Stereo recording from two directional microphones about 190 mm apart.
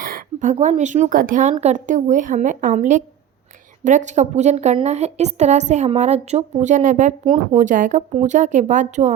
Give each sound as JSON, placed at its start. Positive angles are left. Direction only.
{"t": 0.0, "sound": "a woman's voice", "side_deg": -50}